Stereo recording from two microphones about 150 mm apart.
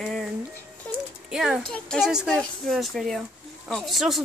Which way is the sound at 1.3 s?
5° right (ahead or behind).